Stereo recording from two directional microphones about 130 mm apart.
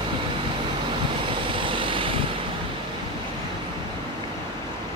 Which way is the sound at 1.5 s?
40° right (ahead or behind).